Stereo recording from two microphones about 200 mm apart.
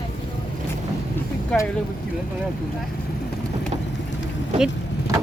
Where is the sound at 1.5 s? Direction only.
5° left (ahead or behind).